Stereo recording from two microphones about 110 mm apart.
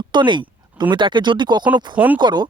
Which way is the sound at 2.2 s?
45° right (ahead or behind).